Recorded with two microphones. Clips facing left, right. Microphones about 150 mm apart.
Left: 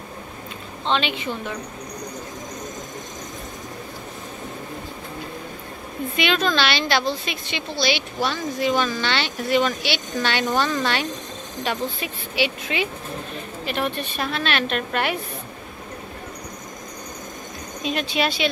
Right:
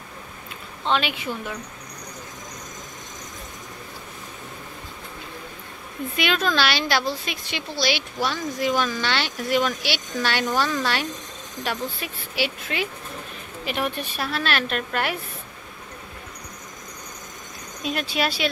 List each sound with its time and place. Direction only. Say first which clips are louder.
0.8 s a woman's voice: left 1 dB; 5° right (ahead or behind)
6.1 s a woman's voice: left 1 dB; 5° right (ahead or behind)
17.8 s a woman's voice: left 2 dB; 5° right (ahead or behind)